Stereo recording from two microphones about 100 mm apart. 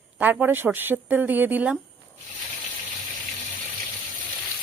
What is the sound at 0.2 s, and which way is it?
Speech, 10° right (ahead or behind).